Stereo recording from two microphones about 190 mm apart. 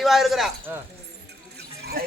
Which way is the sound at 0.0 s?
Centre (ahead or behind).